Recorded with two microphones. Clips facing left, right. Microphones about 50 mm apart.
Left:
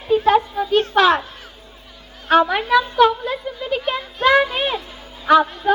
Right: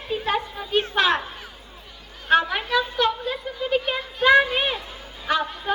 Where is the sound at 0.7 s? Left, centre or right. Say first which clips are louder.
Left 5 dB; centre.